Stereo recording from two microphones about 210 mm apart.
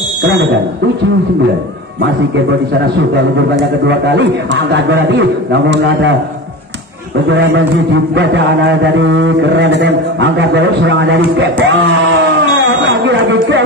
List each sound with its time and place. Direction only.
5.1 s mantra: 55° right (ahead or behind)
8.1 s mantra: 60° right (ahead or behind)